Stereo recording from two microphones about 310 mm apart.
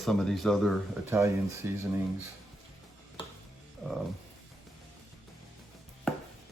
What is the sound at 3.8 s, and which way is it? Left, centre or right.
Music, centre.